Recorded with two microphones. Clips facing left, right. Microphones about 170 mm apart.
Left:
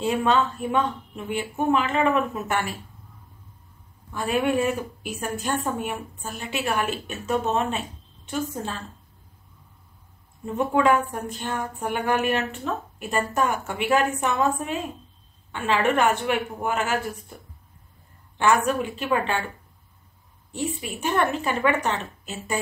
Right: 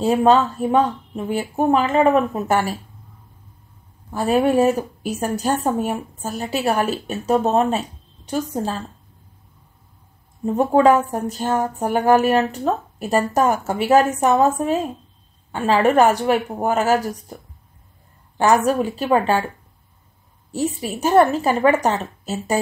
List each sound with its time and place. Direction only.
0.0 s speech: 40° right (ahead or behind)
4.1 s speech: 40° right (ahead or behind)
10.4 s speech: 35° right (ahead or behind)
18.4 s speech: 40° right (ahead or behind)
20.5 s speech: 40° right (ahead or behind)